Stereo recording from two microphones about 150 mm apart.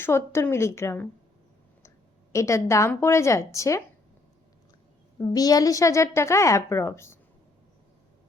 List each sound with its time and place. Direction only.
0.0 s a woman's voice: 15° left (ahead or behind)
2.3 s a woman's voice: 20° left (ahead or behind)
5.3 s a woman's voice: 25° left (ahead or behind)